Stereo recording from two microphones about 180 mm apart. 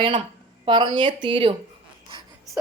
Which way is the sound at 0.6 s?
25° right (ahead or behind).